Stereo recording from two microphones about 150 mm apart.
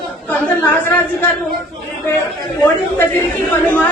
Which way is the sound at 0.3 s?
10° left (ahead or behind).